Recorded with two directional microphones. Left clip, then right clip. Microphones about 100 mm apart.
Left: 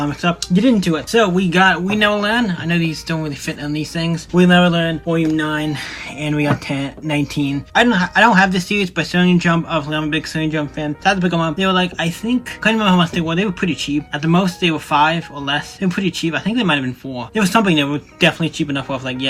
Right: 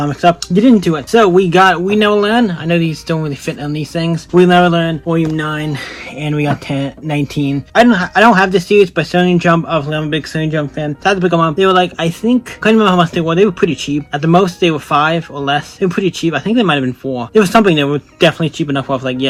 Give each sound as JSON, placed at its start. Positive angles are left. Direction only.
{"t": 0.0, "sound": "speech", "side_deg": -25}
{"t": 1.1, "sound": "speech", "side_deg": -45}
{"t": 1.5, "sound": "speech", "side_deg": -25}
{"t": 6.2, "sound": "speech", "side_deg": -15}
{"t": 12.7, "sound": "speech", "side_deg": -20}